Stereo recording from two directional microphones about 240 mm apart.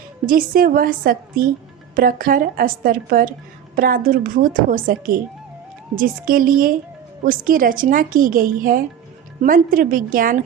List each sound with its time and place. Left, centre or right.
0.3 s speech: right